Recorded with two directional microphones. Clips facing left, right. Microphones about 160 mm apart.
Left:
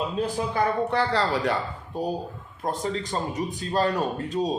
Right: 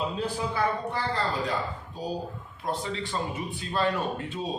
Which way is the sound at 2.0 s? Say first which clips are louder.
Left 7 dB; 60° left (ahead or behind).